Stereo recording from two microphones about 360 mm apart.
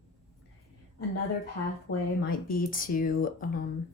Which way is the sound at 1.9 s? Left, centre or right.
Left.